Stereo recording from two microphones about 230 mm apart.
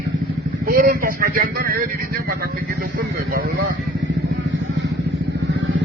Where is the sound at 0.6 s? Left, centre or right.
Right.